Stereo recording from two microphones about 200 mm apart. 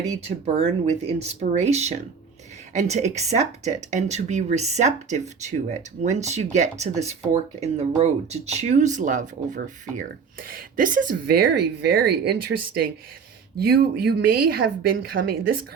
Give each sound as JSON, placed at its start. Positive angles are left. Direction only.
{"t": 0.4, "sound": "a woman's voice", "side_deg": -30}